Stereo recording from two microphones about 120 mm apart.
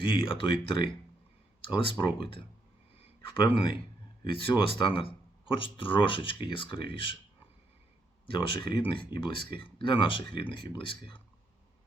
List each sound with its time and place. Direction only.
0.0 s speech: 45° left (ahead or behind)
3.2 s speech: 45° left (ahead or behind)
8.3 s speech: 40° left (ahead or behind)